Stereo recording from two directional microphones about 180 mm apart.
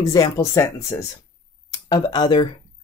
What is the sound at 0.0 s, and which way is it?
Speech, 20° left (ahead or behind).